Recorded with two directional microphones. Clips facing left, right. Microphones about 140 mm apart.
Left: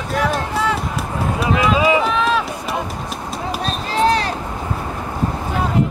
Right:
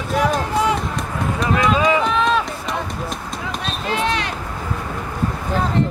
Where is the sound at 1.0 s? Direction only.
5° left (ahead or behind).